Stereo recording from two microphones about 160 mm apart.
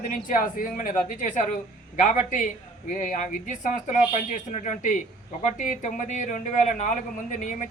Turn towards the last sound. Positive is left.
turn(degrees=50)  # may be behind; listen again after turning